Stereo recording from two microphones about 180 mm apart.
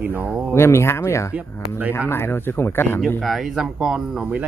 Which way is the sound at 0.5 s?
15° left (ahead or behind).